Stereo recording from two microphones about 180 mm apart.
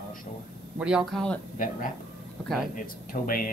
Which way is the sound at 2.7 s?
50° left (ahead or behind).